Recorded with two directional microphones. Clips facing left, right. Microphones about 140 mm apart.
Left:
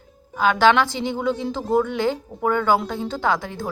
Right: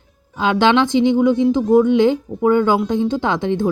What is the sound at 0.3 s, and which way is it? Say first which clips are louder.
Speech: right 2 dB; 20° right (ahead or behind).